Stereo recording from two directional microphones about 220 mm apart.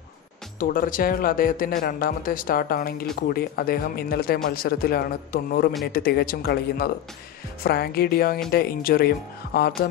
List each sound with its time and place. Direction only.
0.6 s speech: 40° left (ahead or behind)